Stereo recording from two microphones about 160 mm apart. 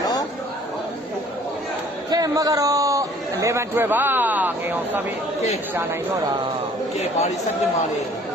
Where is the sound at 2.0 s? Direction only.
25° right (ahead or behind).